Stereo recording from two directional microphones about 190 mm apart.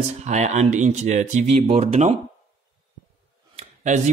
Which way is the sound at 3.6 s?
40° right (ahead or behind).